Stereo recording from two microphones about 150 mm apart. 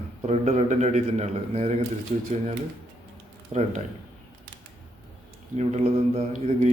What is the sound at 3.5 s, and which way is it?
Speech, 45° right (ahead or behind).